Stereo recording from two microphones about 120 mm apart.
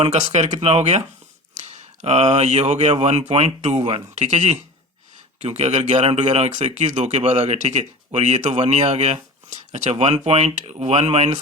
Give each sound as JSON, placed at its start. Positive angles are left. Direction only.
{"t": 0.1, "sound": "speech", "side_deg": -75}